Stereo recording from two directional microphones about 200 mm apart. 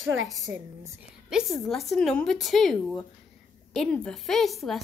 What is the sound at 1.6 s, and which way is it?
A woman's voice, centre (ahead or behind).